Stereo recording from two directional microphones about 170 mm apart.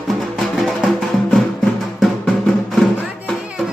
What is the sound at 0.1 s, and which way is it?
Music, centre (ahead or behind).